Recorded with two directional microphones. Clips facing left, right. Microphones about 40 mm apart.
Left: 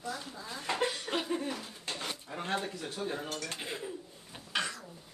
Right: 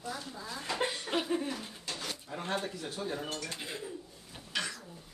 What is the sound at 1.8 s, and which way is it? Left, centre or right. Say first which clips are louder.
Drawer open or close: left 1 dB; left.